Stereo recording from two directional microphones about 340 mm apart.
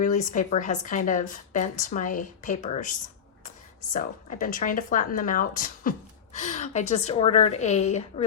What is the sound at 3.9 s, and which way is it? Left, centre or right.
A woman's voice, left.